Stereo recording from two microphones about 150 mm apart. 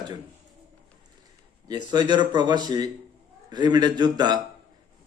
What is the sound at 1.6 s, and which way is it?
A man's voice, 30° right (ahead or behind).